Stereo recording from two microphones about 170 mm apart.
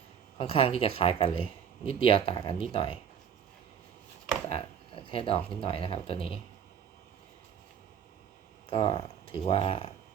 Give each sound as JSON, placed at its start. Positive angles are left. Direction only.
{"t": 0.3, "sound": "speech", "side_deg": 35}
{"t": 4.4, "sound": "speech", "side_deg": 35}
{"t": 8.7, "sound": "speech", "side_deg": 30}